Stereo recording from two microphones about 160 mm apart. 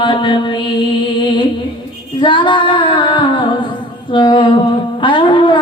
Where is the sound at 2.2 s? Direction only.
30° left (ahead or behind).